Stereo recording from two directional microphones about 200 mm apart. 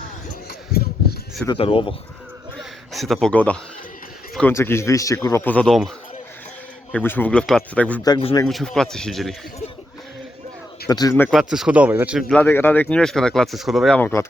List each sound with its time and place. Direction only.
0.7 s a sound: 50° left (ahead or behind)
1.5 s speech: 25° left (ahead or behind)
2.6 s a man's voice: centre (ahead or behind)
6.9 s speech: 10° left (ahead or behind)
8.0 s speech: 25° left (ahead or behind)
8.4 s speech: centre (ahead or behind)
10.8 s speech: 20° left (ahead or behind)
11.3 s speech: centre (ahead or behind)
12.3 s speech: 10° left (ahead or behind)